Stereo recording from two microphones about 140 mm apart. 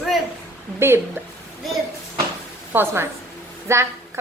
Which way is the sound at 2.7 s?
15° right (ahead or behind).